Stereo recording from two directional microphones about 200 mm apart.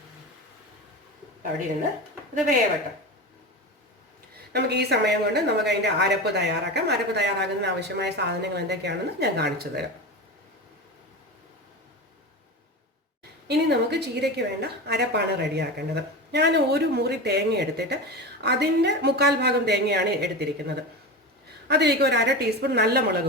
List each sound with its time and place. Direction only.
4.5 s speech: 55° right (ahead or behind)
13.5 s speech: 55° right (ahead or behind)